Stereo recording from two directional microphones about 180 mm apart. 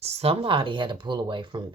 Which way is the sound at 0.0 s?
35° right (ahead or behind).